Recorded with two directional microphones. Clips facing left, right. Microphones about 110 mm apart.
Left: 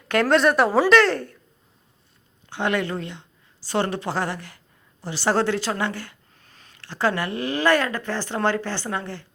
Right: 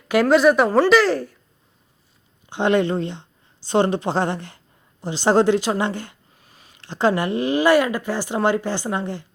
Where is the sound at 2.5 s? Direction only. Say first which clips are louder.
Right 6 dB; 20° right (ahead or behind).